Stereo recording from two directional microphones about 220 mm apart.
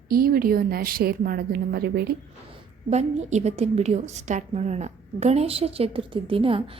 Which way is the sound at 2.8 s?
30° right (ahead or behind).